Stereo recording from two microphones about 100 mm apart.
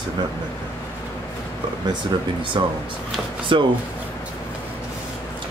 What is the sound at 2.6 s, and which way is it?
Speech, 50° right (ahead or behind).